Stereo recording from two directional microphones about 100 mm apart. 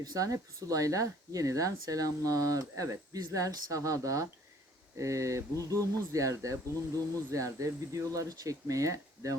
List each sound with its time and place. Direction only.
0.0 s speech: 35° right (ahead or behind)